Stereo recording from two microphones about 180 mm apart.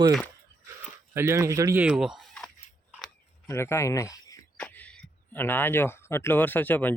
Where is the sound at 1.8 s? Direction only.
5° right (ahead or behind).